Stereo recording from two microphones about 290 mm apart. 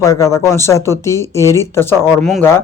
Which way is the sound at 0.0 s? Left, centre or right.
Centre.